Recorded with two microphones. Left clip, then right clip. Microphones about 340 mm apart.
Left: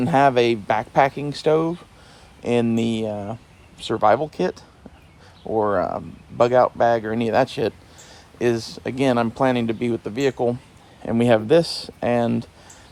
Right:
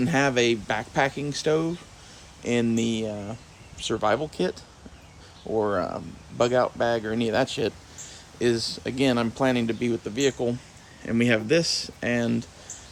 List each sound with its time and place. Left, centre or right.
0.0 s speech: centre